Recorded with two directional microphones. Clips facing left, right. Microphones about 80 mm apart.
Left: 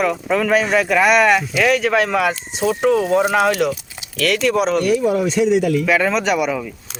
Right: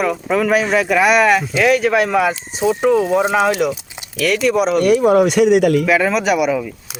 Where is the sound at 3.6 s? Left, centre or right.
Centre.